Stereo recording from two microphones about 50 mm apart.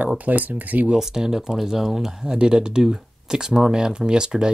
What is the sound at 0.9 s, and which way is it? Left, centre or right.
Speech, centre.